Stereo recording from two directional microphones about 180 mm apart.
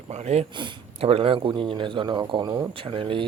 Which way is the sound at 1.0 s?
30° right (ahead or behind).